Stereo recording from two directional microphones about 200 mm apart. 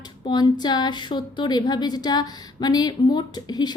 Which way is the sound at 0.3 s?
20° left (ahead or behind).